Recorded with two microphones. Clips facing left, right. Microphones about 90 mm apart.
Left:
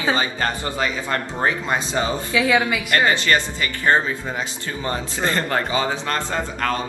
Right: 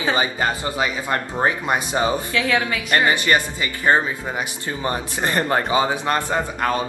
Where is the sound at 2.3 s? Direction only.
10° left (ahead or behind).